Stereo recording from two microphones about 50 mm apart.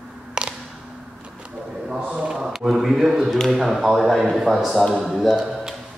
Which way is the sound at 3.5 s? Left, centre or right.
Centre.